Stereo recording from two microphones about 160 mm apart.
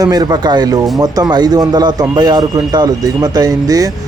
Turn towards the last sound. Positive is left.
turn(degrees=-25)  # may be behind; listen again after turning